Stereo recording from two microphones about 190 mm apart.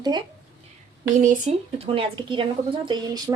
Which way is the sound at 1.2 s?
35° right (ahead or behind).